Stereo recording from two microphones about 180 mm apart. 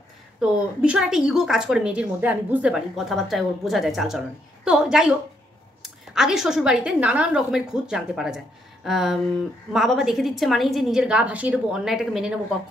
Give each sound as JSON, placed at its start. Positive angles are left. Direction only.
{"t": 0.4, "sound": "a woman's voice", "side_deg": -5}